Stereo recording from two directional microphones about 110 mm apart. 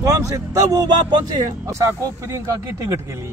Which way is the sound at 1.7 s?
25° right (ahead or behind).